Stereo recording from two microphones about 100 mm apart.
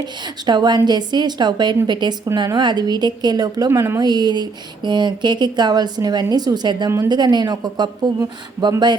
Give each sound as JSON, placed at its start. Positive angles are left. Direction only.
{"t": 0.4, "sound": "speech", "side_deg": -45}
{"t": 3.7, "sound": "a woman's voice", "side_deg": -25}
{"t": 4.0, "sound": "speech", "side_deg": -45}